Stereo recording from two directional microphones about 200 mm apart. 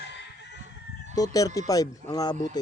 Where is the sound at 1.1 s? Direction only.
20° left (ahead or behind).